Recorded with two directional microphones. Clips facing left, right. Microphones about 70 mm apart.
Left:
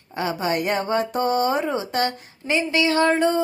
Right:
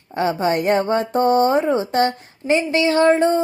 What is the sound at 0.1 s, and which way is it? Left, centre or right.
Speech, right.